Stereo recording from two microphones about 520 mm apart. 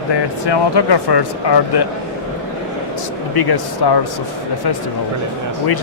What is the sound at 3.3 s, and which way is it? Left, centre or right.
Speech, left.